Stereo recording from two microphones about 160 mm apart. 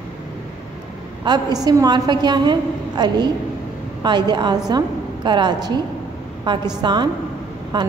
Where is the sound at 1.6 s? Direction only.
25° right (ahead or behind).